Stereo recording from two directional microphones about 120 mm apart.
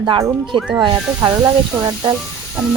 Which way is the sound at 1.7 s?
30° right (ahead or behind).